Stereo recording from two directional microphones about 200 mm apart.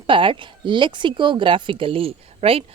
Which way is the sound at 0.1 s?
25° right (ahead or behind).